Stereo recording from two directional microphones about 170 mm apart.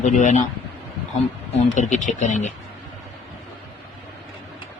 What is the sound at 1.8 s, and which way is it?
Speech, 45° left (ahead or behind).